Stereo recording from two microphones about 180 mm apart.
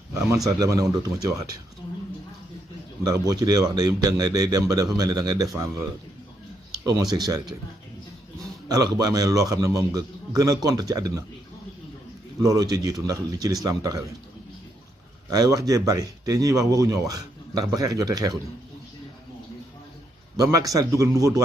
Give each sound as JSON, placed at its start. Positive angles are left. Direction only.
{"t": 0.5, "sound": "speech", "side_deg": -20}
{"t": 3.0, "sound": "speech", "side_deg": -20}
{"t": 6.9, "sound": "speech", "side_deg": -20}
{"t": 8.6, "sound": "speech", "side_deg": -20}
{"t": 12.4, "sound": "speech", "side_deg": -20}
{"t": 15.2, "sound": "speech", "side_deg": -20}
{"t": 20.3, "sound": "a man's voice", "side_deg": -20}